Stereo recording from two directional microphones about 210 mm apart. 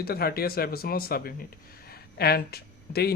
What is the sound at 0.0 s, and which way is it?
Speech, 45° left (ahead or behind).